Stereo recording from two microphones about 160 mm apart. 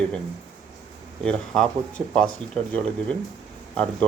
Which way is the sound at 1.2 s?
5° left (ahead or behind).